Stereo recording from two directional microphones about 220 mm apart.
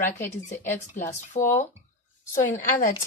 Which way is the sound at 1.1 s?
35° left (ahead or behind).